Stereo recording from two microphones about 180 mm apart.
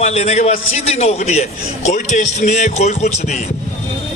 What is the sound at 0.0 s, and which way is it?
A man's voice, 40° left (ahead or behind).